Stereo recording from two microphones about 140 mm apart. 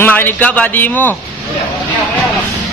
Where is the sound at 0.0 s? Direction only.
15° left (ahead or behind).